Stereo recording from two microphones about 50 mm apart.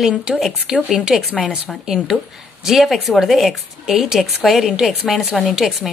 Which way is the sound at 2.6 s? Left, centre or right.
Centre.